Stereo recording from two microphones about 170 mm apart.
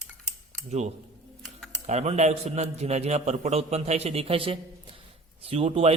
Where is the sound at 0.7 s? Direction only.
40° right (ahead or behind).